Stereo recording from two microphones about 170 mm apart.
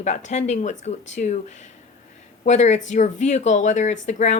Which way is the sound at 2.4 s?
45° left (ahead or behind).